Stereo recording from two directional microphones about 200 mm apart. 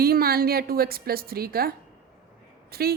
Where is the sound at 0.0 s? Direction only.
50° right (ahead or behind).